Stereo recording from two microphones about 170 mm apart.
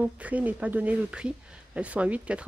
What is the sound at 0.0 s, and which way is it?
Speech, 10° right (ahead or behind).